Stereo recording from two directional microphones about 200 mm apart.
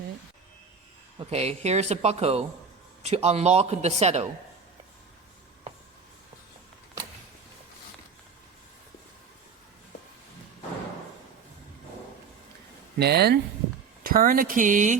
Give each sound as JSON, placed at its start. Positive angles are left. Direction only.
{"t": 1.2, "sound": "speech", "side_deg": -30}
{"t": 13.0, "sound": "speech", "side_deg": -55}